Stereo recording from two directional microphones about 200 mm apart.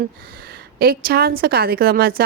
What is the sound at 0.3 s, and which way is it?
A woman's voice, 50° right (ahead or behind).